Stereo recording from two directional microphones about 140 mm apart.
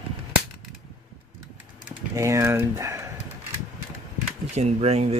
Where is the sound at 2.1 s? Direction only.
20° right (ahead or behind).